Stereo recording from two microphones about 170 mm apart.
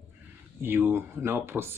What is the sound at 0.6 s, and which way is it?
Speech, 10° right (ahead or behind).